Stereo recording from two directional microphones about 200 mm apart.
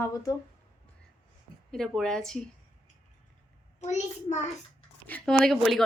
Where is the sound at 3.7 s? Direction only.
35° left (ahead or behind).